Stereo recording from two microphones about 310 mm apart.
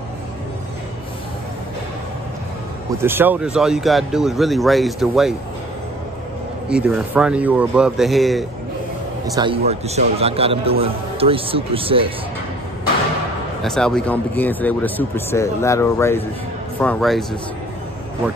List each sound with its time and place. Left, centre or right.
3.0 s speech: centre
6.7 s speech: centre
9.3 s a man's voice: centre
13.6 s speech: centre